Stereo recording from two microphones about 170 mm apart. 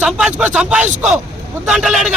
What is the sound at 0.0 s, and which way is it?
Speech, 5° right (ahead or behind).